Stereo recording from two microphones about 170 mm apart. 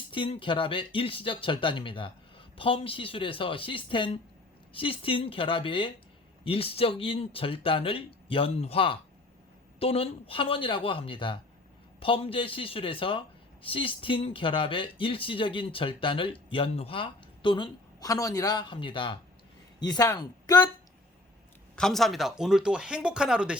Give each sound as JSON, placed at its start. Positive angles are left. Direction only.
{"t": 0.1, "sound": "speech", "side_deg": 30}
{"t": 21.8, "sound": "speech", "side_deg": 0}